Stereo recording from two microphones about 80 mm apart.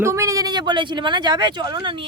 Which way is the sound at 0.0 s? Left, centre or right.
Right.